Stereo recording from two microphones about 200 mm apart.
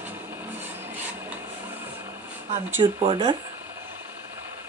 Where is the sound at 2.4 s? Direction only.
35° right (ahead or behind).